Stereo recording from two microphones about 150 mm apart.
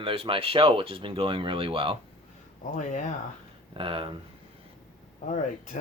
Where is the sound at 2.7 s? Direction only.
55° left (ahead or behind).